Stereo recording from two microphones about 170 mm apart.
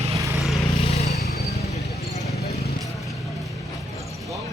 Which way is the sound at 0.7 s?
35° left (ahead or behind).